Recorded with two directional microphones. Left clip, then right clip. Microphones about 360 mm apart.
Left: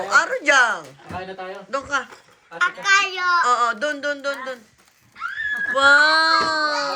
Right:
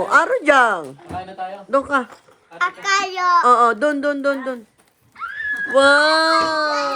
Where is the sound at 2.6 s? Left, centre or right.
Right.